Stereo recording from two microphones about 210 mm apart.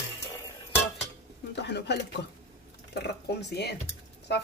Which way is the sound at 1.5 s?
55° left (ahead or behind).